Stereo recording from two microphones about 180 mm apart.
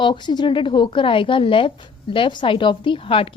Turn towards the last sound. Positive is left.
turn(degrees=30)  # may be behind; listen again after turning